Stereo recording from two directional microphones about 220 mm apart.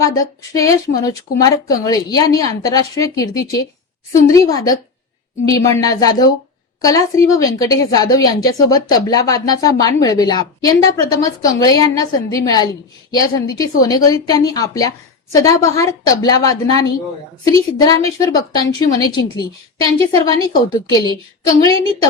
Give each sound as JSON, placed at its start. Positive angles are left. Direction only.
{"t": 0.0, "sound": "a woman's voice", "side_deg": 15}